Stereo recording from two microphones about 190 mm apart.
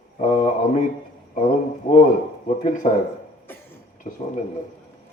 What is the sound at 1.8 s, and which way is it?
Speech, 45° left (ahead or behind).